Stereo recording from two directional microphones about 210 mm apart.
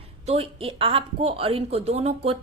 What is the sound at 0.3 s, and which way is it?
A woman's voice, 30° right (ahead or behind).